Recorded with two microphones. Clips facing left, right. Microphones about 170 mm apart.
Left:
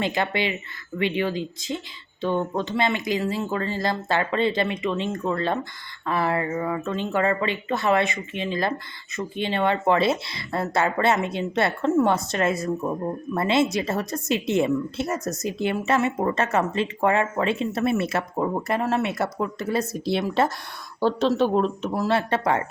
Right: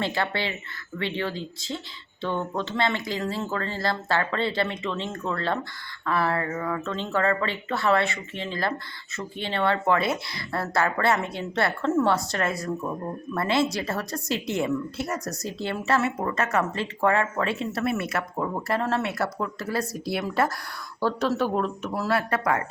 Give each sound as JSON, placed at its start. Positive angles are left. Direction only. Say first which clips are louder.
{"t": 0.0, "sound": "speech", "louder": "left 3 dB", "side_deg": 15}